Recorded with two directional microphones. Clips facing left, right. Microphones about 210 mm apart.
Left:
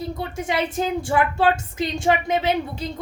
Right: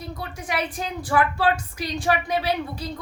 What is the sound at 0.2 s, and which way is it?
A woman's voice, 25° left (ahead or behind).